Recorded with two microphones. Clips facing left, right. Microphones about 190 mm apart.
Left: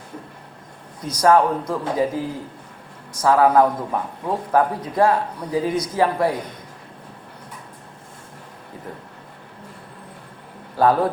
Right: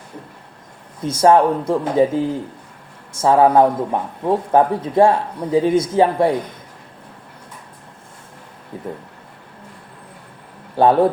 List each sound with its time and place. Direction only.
1.0 s a man's voice: 25° right (ahead or behind)
10.8 s a man's voice: 25° right (ahead or behind)